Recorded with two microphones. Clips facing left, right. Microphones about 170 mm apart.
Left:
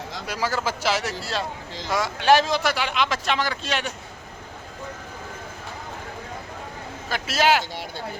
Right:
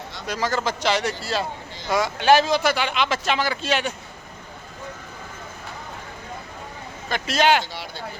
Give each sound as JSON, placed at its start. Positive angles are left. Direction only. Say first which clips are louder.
{"t": 0.3, "sound": "speech", "louder": "right 2 dB", "side_deg": 10}
{"t": 7.1, "sound": "speech", "louder": "right 1 dB", "side_deg": 5}
{"t": 7.7, "sound": "speech", "louder": "left 1 dB", "side_deg": 50}